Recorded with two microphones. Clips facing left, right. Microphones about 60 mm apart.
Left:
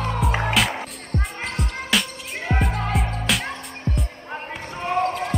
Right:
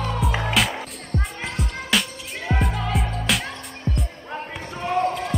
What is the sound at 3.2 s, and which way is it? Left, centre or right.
Music, centre.